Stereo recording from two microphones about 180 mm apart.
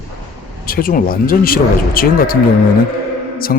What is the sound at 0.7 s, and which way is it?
Speech, 50° left (ahead or behind).